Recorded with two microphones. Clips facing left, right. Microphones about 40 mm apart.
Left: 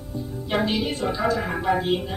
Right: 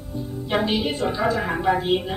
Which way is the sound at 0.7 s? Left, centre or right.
Centre.